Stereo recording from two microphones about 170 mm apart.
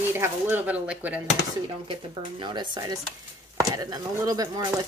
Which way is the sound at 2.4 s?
25° right (ahead or behind).